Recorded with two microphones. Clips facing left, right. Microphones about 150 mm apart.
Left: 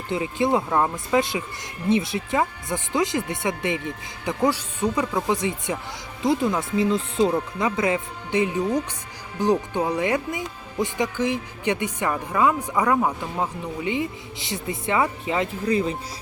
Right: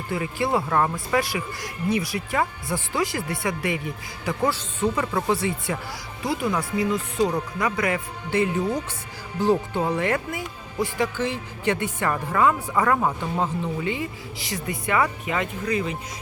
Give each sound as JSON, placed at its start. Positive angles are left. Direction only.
{"t": 0.1, "sound": "speech", "side_deg": 20}